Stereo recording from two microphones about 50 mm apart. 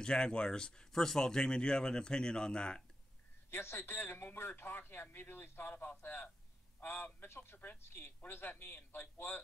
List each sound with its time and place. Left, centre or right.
0.0 s speech: centre
3.4 s a man's voice: left